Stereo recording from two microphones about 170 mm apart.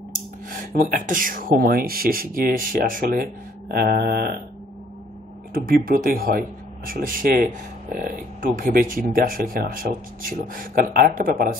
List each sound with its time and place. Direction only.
0.1 s speech: 55° right (ahead or behind)
5.9 s speech: 60° right (ahead or behind)